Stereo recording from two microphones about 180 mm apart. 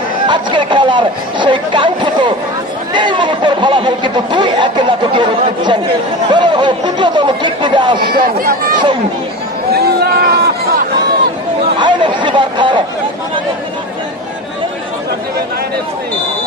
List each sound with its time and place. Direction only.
0.3 s speech: 25° right (ahead or behind)
6.3 s speech: 25° right (ahead or behind)
8.1 s speech: 55° right (ahead or behind)
9.7 s a sound: 60° right (ahead or behind)
11.8 s speech: 25° right (ahead or behind)